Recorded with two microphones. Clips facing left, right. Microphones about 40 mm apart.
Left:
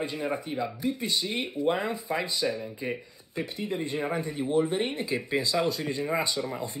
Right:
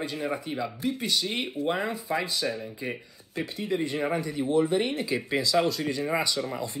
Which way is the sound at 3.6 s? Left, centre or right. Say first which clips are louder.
Right 3 dB; right.